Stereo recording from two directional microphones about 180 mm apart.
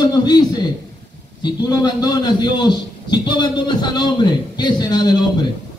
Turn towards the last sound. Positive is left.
turn(degrees=20)  # may be behind; listen again after turning